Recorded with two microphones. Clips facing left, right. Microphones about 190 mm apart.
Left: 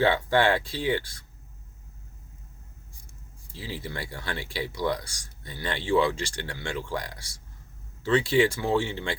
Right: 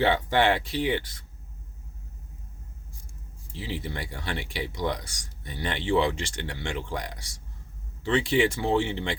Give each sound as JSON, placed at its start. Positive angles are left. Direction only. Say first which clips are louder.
{"t": 0.0, "sound": "speech", "louder": "even", "side_deg": -20}
{"t": 3.5, "sound": "speech", "louder": "right 2 dB", "side_deg": -20}